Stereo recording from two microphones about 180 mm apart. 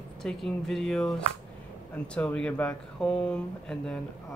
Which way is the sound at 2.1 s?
5° left (ahead or behind).